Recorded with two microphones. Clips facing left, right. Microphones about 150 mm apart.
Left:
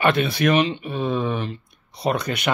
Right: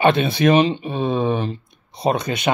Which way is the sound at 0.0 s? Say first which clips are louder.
Right 3 dB; 25° right (ahead or behind).